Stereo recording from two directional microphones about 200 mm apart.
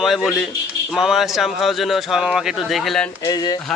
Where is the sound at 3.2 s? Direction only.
20° left (ahead or behind).